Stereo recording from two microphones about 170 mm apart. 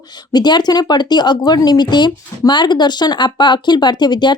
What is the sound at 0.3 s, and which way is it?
Speech, 25° left (ahead or behind).